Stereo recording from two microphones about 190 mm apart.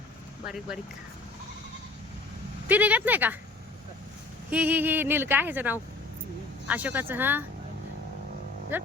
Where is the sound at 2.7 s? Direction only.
10° right (ahead or behind).